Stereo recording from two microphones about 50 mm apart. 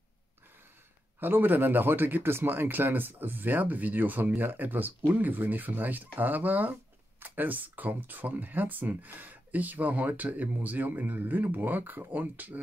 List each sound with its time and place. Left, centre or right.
1.2 s speech: right